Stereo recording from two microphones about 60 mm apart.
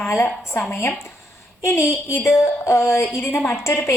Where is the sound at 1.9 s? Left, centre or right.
Left.